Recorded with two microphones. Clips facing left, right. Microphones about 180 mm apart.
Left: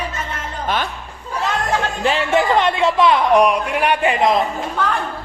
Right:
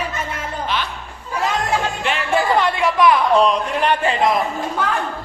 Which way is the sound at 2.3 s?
20° left (ahead or behind).